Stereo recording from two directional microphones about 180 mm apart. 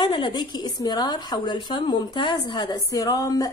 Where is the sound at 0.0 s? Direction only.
25° left (ahead or behind).